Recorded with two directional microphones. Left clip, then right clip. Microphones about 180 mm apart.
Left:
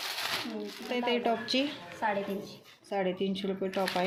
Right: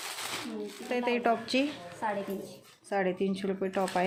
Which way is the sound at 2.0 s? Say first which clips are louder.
Left 2 dB; 5° left (ahead or behind).